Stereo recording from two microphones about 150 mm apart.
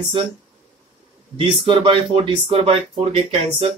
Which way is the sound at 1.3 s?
35° right (ahead or behind).